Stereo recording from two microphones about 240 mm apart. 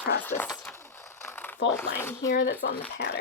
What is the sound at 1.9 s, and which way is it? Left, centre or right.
Speech, centre.